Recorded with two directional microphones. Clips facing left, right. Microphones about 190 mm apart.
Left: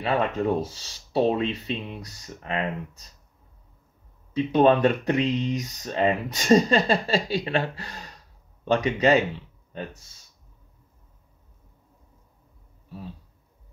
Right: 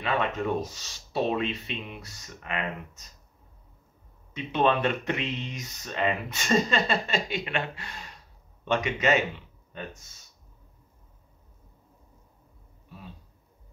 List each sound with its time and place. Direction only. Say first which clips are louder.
0.0 s speech: left 4 dB; 35° left (ahead or behind)
4.3 s speech: left 6 dB; 35° left (ahead or behind)